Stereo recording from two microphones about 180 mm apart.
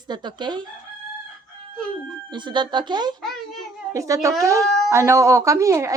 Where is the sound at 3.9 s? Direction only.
15° right (ahead or behind).